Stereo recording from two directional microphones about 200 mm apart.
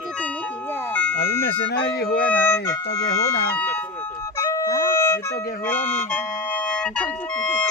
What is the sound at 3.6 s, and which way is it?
Music, 10° left (ahead or behind).